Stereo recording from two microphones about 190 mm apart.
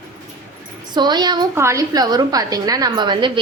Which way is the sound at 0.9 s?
20° right (ahead or behind).